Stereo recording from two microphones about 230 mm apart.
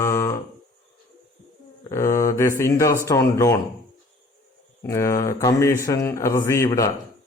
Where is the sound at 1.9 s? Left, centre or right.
Centre.